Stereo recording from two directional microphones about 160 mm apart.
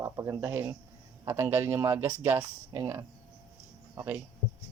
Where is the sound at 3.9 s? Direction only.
15° right (ahead or behind).